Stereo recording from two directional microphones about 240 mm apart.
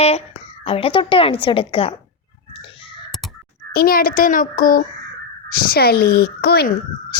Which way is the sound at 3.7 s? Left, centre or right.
Left.